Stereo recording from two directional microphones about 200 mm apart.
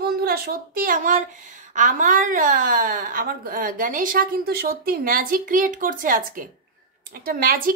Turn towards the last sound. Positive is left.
turn(degrees=-45)  # may be behind; listen again after turning